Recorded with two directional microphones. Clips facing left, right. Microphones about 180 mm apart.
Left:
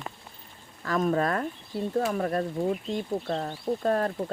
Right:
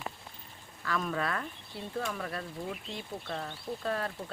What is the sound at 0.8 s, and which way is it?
Speech, 45° left (ahead or behind).